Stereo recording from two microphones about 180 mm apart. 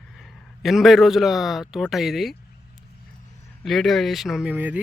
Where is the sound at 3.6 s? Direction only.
Centre (ahead or behind).